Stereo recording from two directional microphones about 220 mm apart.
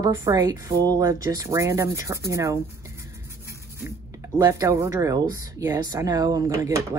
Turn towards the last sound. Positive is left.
turn(degrees=-15)  # may be behind; listen again after turning